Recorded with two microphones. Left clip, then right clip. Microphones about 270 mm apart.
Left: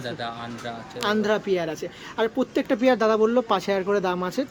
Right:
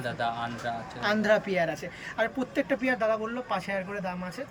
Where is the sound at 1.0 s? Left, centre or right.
Centre.